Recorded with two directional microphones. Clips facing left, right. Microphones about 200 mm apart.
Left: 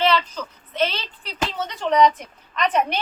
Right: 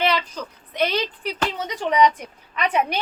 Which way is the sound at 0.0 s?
10° right (ahead or behind).